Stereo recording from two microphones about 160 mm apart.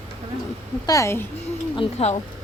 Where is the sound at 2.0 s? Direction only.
40° left (ahead or behind).